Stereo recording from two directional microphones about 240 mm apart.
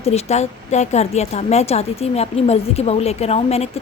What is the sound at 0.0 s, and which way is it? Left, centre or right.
Speech, left.